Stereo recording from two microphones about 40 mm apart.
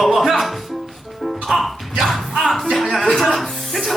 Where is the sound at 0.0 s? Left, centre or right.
Centre.